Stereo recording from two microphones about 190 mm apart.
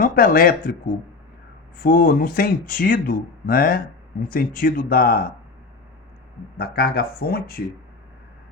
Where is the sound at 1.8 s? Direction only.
45° left (ahead or behind).